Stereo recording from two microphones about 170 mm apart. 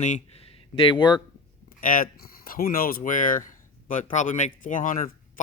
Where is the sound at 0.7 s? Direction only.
30° left (ahead or behind).